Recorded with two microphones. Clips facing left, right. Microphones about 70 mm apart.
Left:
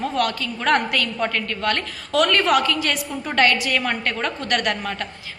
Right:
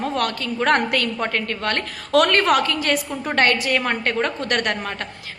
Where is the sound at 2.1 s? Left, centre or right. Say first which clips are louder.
Right 2 dB; right.